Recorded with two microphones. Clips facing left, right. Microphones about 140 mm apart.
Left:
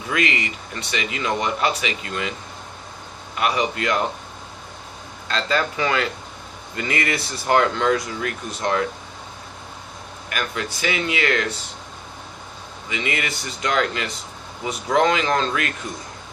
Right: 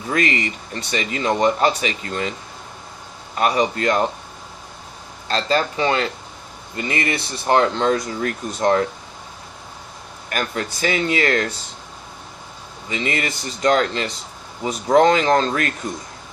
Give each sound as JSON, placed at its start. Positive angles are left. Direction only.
{"t": 0.1, "sound": "speech", "side_deg": -40}
{"t": 3.3, "sound": "speech", "side_deg": -40}
{"t": 5.3, "sound": "speech", "side_deg": -30}
{"t": 10.2, "sound": "speech", "side_deg": -40}
{"t": 12.9, "sound": "speech", "side_deg": -35}